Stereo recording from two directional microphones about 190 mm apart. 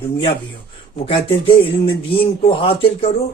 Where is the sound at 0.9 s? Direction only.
30° left (ahead or behind).